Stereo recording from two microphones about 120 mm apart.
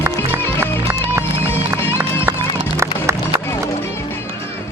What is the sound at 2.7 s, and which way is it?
Music, 25° right (ahead or behind).